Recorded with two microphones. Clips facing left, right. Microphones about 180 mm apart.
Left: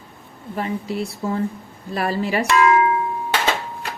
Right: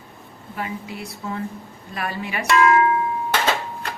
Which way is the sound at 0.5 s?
35° left (ahead or behind).